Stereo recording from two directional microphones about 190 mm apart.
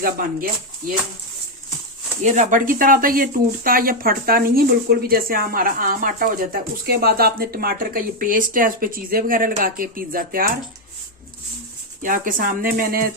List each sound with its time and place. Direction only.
2.2 s speech: 40° right (ahead or behind)
12.0 s speech: 45° right (ahead or behind)